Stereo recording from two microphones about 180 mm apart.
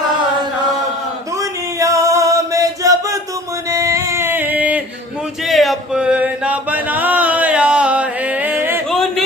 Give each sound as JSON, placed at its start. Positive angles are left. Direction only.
{"t": 1.4, "sound": "male singing", "side_deg": -20}
{"t": 3.7, "sound": "music", "side_deg": -15}
{"t": 5.5, "sound": "chant", "side_deg": 0}
{"t": 8.9, "sound": "a sound", "side_deg": 0}